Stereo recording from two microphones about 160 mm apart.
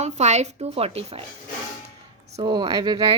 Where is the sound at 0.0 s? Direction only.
45° right (ahead or behind).